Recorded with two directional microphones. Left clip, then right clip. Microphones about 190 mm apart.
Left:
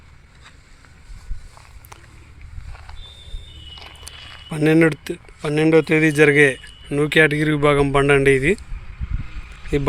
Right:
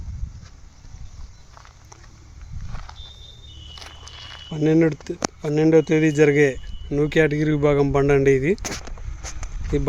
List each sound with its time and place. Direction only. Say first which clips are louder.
4.1 s a sound: right 1 dB; 20° right (ahead or behind)
4.4 s speech: left 3 dB; centre (ahead or behind)
9.7 s speech: left 3 dB; centre (ahead or behind)